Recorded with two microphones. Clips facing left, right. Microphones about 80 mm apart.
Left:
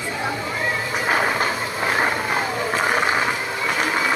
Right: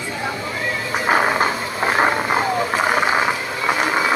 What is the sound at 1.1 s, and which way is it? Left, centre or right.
Vehicle, centre.